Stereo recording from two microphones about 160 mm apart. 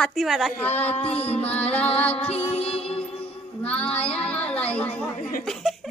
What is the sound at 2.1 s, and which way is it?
Music, 40° left (ahead or behind).